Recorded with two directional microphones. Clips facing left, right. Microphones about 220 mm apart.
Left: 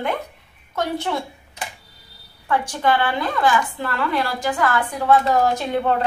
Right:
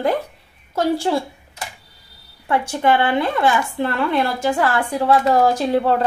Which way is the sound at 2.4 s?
25° right (ahead or behind).